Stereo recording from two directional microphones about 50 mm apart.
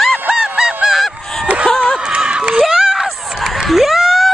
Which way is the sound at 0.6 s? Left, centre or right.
Centre.